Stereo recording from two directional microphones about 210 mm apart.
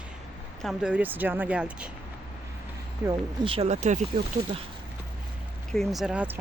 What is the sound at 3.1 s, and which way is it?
Speech, 25° right (ahead or behind).